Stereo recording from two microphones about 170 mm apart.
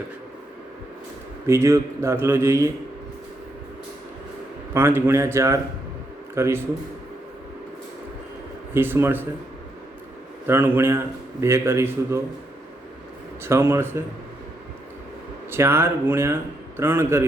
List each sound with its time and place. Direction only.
1.5 s a man's voice: 15° right (ahead or behind)
4.7 s a man's voice: 15° right (ahead or behind)
8.7 s a man's voice: 15° right (ahead or behind)
10.4 s a man's voice: 15° right (ahead or behind)
13.4 s a man's voice: 15° right (ahead or behind)
15.4 s a man's voice: 15° right (ahead or behind)